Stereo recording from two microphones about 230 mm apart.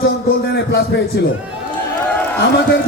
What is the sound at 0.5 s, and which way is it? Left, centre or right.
Speech, left.